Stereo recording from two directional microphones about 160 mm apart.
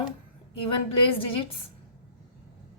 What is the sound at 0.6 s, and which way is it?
Speech, 35° left (ahead or behind).